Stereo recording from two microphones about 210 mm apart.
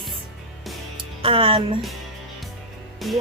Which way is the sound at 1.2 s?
25° right (ahead or behind).